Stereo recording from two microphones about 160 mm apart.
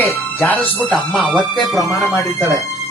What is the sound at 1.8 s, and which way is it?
Speech, 20° left (ahead or behind).